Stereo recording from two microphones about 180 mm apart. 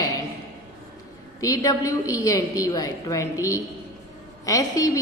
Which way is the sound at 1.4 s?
20° left (ahead or behind).